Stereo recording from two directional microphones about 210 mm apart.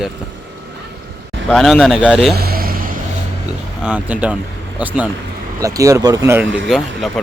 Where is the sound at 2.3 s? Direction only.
45° right (ahead or behind).